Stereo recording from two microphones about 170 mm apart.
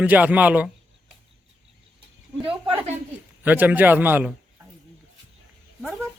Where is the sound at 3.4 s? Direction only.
10° right (ahead or behind).